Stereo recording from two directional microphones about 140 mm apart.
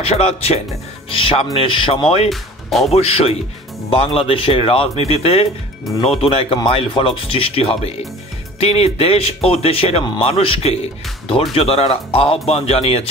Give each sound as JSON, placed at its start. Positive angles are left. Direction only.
{"t": 0.0, "sound": "speech", "side_deg": 45}
{"t": 2.2, "sound": "speech", "side_deg": 0}
{"t": 2.9, "sound": "speech", "side_deg": 45}